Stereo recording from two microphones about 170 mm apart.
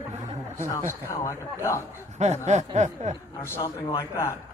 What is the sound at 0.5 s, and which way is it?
A man's voice, 15° left (ahead or behind).